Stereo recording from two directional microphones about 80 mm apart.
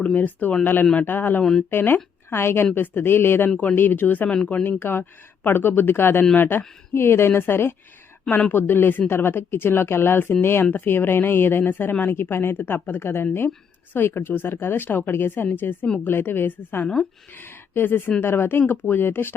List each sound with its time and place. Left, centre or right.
0.0 s a woman's voice: left
4.4 s speech: centre
4.8 s speech: left
16.8 s speech: centre
17.3 s speech: left